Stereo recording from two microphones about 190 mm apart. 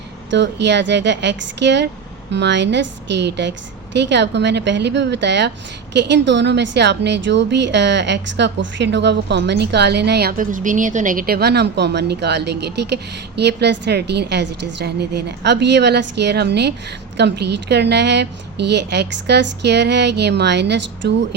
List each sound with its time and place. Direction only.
0.3 s a woman's voice: 65° right (ahead or behind)